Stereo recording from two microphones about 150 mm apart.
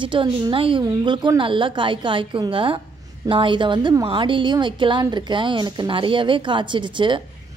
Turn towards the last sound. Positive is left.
turn(degrees=-30)  # may be behind; listen again after turning